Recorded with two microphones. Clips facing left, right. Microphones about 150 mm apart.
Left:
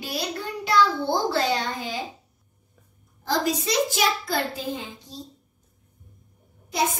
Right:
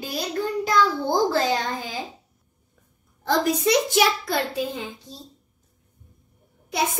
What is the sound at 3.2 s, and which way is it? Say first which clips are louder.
Speech: right 4 dB; 60° right (ahead or behind).